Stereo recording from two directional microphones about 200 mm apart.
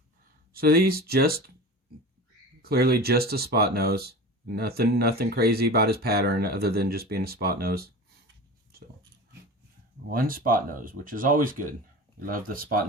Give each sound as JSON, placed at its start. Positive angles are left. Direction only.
{"t": 0.5, "sound": "speech", "side_deg": -50}
{"t": 2.6, "sound": "speech", "side_deg": -50}
{"t": 10.1, "sound": "speech", "side_deg": -45}